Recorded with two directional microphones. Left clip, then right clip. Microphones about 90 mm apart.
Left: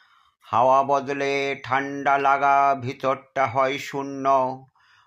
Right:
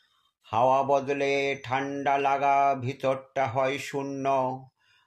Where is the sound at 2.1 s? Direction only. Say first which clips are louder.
Left 5 dB; 30° left (ahead or behind).